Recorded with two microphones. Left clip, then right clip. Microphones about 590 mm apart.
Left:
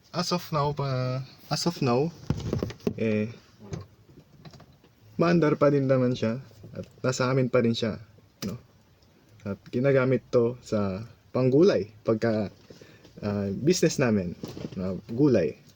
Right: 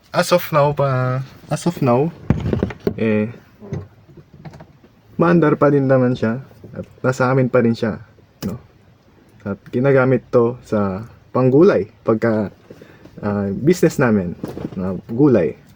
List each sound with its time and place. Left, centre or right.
0.1 s speech: left
5.1 s speech: left
9.4 s speech: left